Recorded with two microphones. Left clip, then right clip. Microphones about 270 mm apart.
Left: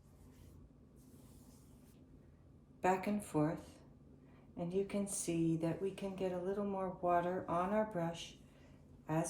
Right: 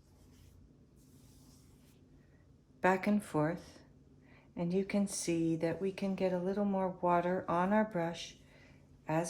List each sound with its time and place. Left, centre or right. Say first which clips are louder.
2.8 s speech: right 4 dB; right